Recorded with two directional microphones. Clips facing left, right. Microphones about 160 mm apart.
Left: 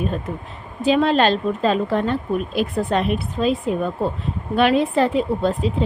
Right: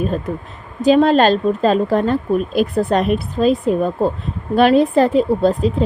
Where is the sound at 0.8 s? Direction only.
40° right (ahead or behind).